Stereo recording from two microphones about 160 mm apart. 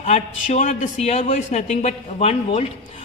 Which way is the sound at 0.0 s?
45° left (ahead or behind).